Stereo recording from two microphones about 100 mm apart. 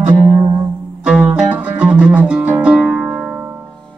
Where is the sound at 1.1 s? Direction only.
10° right (ahead or behind).